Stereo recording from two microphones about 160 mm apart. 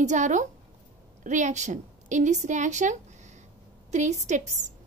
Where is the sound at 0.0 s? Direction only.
50° right (ahead or behind).